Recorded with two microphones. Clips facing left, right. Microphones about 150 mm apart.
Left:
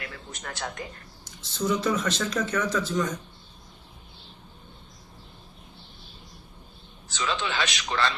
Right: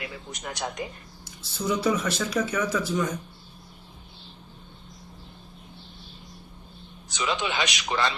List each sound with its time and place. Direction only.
0.0 s speech: 15° right (ahead or behind)
7.1 s speech: 15° right (ahead or behind)